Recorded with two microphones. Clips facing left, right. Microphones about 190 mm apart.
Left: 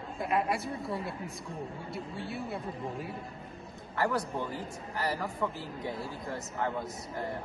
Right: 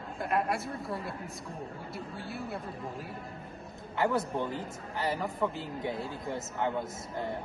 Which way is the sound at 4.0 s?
20° right (ahead or behind).